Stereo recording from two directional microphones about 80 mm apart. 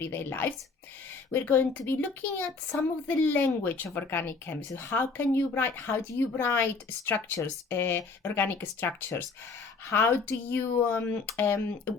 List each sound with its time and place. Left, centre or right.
0.0 s speech: left